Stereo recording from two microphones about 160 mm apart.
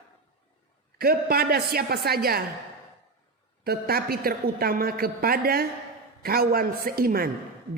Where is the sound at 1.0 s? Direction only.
70° right (ahead or behind).